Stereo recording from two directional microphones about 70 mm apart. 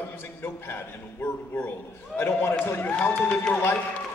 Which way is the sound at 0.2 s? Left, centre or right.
Left.